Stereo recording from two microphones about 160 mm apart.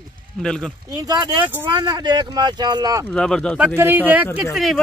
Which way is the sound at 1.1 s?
25° right (ahead or behind).